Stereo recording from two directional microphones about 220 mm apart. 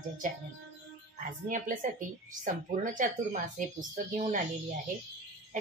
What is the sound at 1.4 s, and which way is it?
Speech, 35° right (ahead or behind).